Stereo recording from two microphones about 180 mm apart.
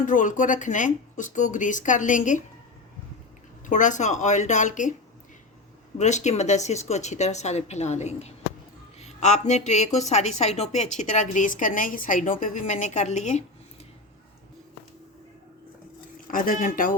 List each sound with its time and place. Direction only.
0.0 s speech: 45° left (ahead or behind)
3.7 s speech: 45° left (ahead or behind)
6.0 s a woman's voice: 40° left (ahead or behind)
16.2 s speech: 50° left (ahead or behind)